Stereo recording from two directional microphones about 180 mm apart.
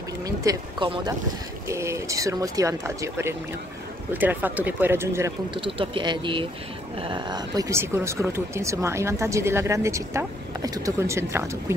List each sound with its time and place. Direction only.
0.2 s speech: 20° right (ahead or behind)
5.5 s speech: 30° right (ahead or behind)